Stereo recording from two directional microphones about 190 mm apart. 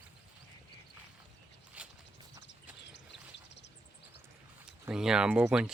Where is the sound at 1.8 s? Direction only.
10° right (ahead or behind).